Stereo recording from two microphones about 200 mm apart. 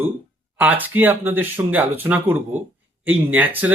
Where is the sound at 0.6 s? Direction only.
10° right (ahead or behind).